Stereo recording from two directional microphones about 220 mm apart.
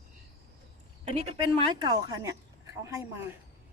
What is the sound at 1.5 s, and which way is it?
A woman's voice, 20° right (ahead or behind).